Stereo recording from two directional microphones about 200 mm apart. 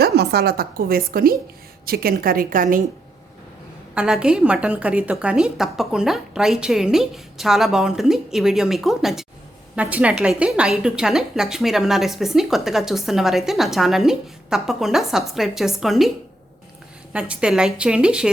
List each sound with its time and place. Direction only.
0.0 s a woman's voice: 50° right (ahead or behind)
3.9 s a woman's voice: 5° right (ahead or behind)